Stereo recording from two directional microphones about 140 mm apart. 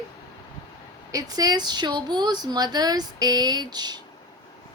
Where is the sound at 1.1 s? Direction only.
25° right (ahead or behind).